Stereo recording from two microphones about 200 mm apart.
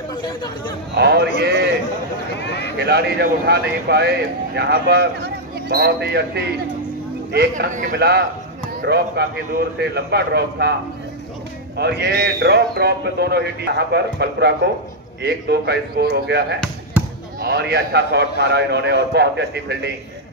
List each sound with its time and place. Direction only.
0.2 s speech: 20° left (ahead or behind)
0.9 s speech: 55° right (ahead or behind)
2.4 s a sound: 60° left (ahead or behind)
2.8 s speech: 55° right (ahead or behind)
7.3 s speech: 40° right (ahead or behind)
11.7 s speech: 55° right (ahead or behind)